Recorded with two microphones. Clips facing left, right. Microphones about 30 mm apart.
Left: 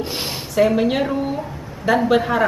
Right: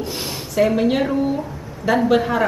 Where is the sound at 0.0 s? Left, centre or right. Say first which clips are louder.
Left 1 dB; left.